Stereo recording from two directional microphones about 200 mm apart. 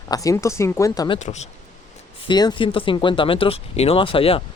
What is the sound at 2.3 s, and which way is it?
Speech, 20° left (ahead or behind).